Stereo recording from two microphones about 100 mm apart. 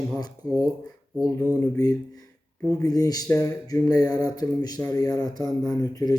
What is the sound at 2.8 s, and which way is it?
Speech, 40° left (ahead or behind).